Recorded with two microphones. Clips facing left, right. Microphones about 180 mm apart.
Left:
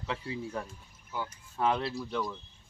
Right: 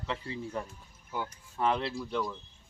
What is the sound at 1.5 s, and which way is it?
Speech, 5° left (ahead or behind).